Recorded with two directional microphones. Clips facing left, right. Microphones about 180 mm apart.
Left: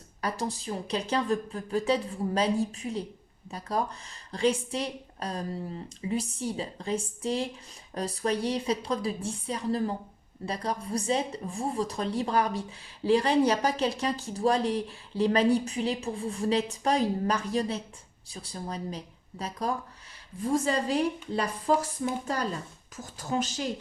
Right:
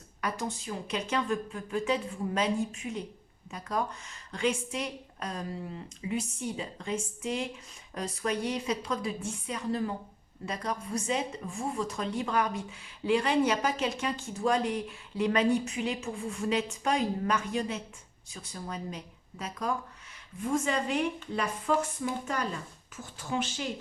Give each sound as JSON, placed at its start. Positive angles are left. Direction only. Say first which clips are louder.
{"t": 0.2, "sound": "speech", "louder": "left 2 dB", "side_deg": 35}
{"t": 23.1, "sound": "speech", "louder": "left 3 dB", "side_deg": 40}